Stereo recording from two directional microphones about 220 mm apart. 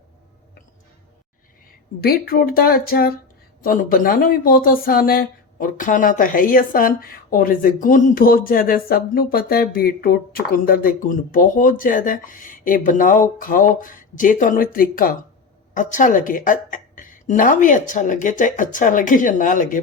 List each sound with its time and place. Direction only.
2.0 s speech: 45° left (ahead or behind)